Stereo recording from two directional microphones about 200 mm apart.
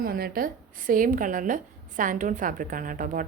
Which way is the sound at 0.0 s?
50° right (ahead or behind).